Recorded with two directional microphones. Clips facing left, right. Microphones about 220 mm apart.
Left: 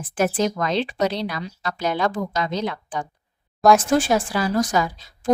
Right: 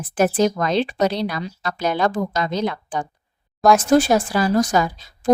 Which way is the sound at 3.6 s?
Centre (ahead or behind).